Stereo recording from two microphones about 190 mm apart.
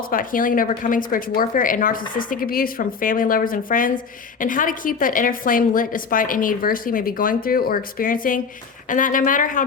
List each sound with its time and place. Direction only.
0.1 s a woman's voice: 45° left (ahead or behind)